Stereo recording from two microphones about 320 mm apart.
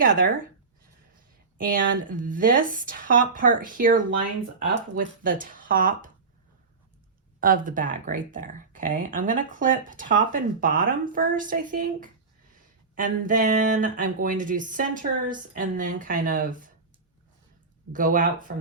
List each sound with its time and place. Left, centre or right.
1.5 s speech: right
7.3 s speech: right
17.9 s speech: right